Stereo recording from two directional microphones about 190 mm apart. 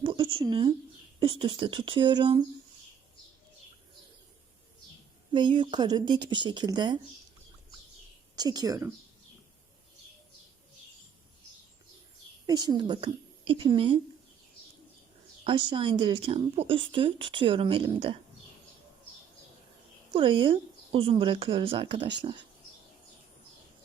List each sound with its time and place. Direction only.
0.0 s a sound: 25° right (ahead or behind)
0.3 s speech: 25° right (ahead or behind)
5.3 s speech: 25° right (ahead or behind)
8.4 s speech: 20° right (ahead or behind)
12.5 s speech: 20° right (ahead or behind)
15.4 s speech: 25° right (ahead or behind)
20.1 s speech: 25° right (ahead or behind)